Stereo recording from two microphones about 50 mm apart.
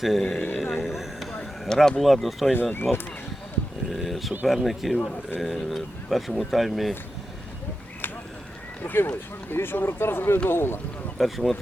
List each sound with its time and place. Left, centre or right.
0.0 s speech: centre
0.5 s vehicle: centre
1.3 s speech: centre
8.8 s speech: left
11.2 s speech: centre